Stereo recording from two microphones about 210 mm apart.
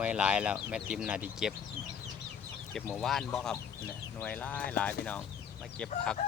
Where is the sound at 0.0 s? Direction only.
5° right (ahead or behind).